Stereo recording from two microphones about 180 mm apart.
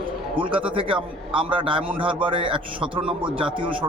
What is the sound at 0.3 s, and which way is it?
A man's voice, 30° right (ahead or behind).